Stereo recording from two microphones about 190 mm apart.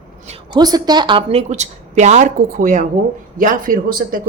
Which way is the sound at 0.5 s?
20° right (ahead or behind).